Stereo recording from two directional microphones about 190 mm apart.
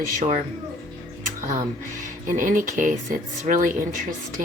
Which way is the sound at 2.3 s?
45° right (ahead or behind).